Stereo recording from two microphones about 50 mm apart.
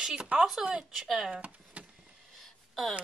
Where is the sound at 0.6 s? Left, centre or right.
Centre.